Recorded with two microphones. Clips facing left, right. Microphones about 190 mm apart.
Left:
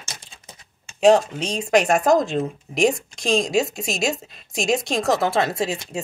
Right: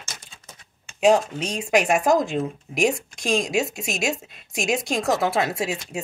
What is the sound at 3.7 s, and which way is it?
Speech, 35° left (ahead or behind).